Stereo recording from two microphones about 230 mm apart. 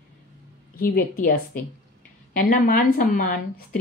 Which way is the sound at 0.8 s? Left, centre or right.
Left.